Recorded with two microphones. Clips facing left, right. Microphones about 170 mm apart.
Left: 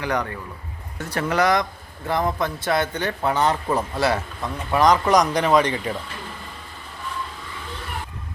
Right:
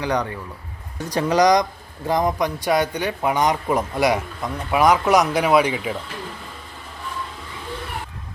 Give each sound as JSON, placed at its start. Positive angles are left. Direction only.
{"t": 0.0, "sound": "speech", "side_deg": -15}